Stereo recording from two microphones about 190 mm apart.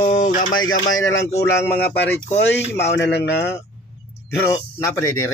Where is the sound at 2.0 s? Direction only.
65° left (ahead or behind).